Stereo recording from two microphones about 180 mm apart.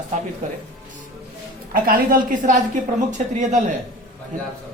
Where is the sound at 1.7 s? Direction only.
50° right (ahead or behind).